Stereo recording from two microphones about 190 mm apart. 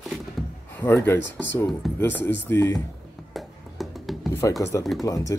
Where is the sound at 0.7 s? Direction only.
10° left (ahead or behind).